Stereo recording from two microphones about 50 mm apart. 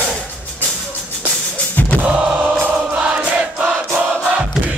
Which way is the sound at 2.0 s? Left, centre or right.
Centre.